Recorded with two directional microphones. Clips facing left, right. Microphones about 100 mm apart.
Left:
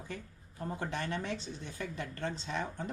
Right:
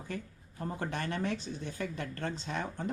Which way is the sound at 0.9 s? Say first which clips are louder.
Right 3 dB; 50° right (ahead or behind).